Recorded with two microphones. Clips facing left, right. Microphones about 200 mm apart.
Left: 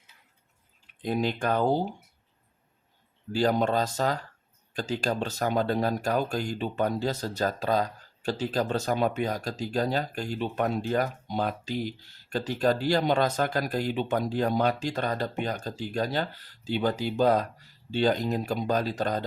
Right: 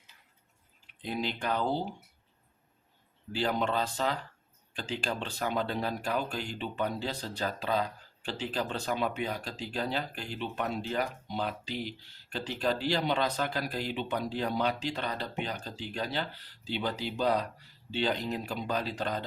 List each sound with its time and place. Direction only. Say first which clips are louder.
1.0 s speech: left 6 dB; 45° left (ahead or behind)
3.3 s speech: left 6 dB; 40° left (ahead or behind)